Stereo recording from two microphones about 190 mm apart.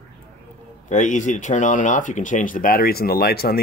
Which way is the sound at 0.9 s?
40° left (ahead or behind).